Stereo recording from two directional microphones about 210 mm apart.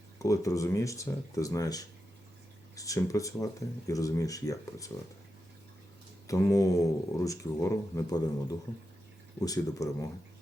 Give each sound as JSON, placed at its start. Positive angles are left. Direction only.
{"t": 0.2, "sound": "speech", "side_deg": 15}
{"t": 6.2, "sound": "speech", "side_deg": 15}